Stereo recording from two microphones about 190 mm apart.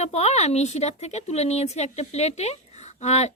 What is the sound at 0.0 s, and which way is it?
Speech, 35° left (ahead or behind).